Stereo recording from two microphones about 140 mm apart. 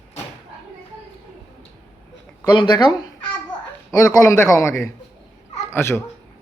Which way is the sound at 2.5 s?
35° left (ahead or behind).